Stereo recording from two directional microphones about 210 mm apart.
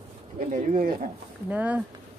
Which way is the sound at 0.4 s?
35° right (ahead or behind).